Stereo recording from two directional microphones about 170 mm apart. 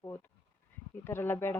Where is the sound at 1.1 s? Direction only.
15° left (ahead or behind).